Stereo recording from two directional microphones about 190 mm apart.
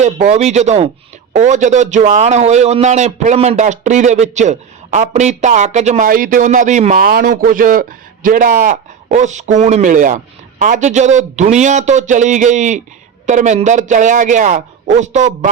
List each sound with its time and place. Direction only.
0.0 s a man's voice: 35° right (ahead or behind)